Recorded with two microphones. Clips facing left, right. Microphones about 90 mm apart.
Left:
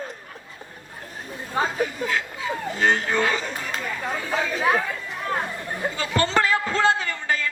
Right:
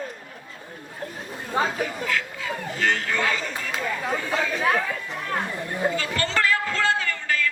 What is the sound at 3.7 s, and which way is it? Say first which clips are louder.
Chatter: right 3 dB; 5° right (ahead or behind).